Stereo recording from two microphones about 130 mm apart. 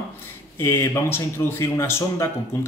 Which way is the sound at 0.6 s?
20° left (ahead or behind).